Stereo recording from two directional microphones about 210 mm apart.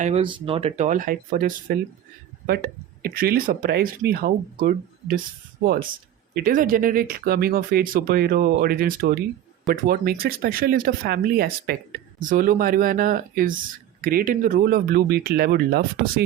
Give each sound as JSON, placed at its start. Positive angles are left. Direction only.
{"t": 0.0, "sound": "speech", "side_deg": -30}
{"t": 6.3, "sound": "speech", "side_deg": -40}